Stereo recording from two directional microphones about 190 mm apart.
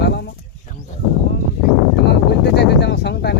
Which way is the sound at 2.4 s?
65° left (ahead or behind).